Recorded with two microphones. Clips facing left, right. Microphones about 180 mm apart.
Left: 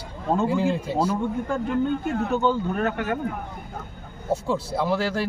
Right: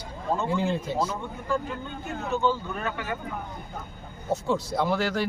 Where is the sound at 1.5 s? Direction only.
55° left (ahead or behind).